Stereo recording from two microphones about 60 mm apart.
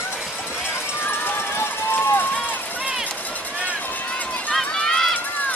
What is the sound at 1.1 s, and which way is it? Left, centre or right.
Run, left.